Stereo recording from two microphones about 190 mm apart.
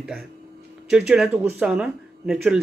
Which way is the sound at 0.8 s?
5° right (ahead or behind).